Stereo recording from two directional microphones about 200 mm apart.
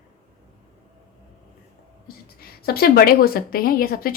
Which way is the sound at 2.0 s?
50° left (ahead or behind).